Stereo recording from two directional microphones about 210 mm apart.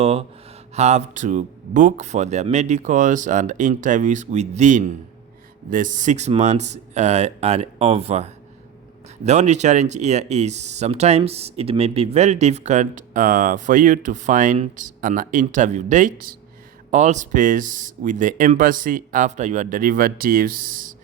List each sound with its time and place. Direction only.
0.0 s speech: 30° right (ahead or behind)